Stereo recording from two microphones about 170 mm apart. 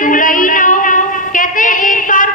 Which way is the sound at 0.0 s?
50° left (ahead or behind).